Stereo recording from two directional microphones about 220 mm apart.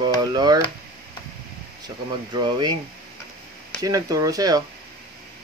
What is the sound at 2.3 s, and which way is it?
Speech, 20° right (ahead or behind).